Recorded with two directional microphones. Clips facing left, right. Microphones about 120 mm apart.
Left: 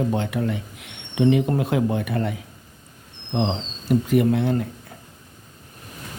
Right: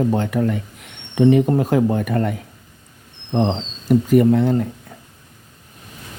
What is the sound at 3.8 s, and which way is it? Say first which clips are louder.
Speech: right 5 dB; 45° right (ahead or behind).